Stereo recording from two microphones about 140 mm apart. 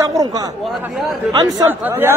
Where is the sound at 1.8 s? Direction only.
15° right (ahead or behind).